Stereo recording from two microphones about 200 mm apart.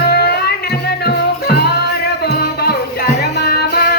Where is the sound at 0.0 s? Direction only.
50° left (ahead or behind).